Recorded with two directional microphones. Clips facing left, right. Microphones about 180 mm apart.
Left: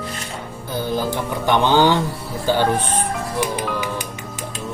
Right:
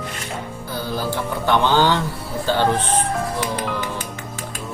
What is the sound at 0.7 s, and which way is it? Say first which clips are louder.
Speech: left 3 dB; 20° left (ahead or behind).